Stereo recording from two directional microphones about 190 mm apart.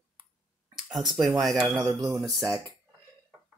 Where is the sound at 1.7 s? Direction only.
15° right (ahead or behind).